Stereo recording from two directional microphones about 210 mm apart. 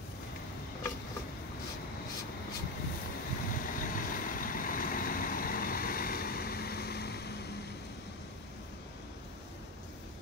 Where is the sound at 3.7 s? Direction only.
40° left (ahead or behind).